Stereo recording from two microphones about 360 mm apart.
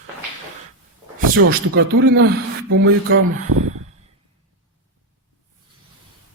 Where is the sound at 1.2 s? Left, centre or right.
Right.